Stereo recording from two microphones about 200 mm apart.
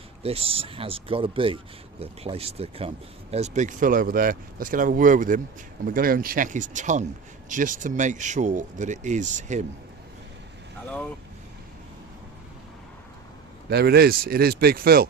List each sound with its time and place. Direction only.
0.2 s speech: 30° right (ahead or behind)
13.7 s speech: 55° right (ahead or behind)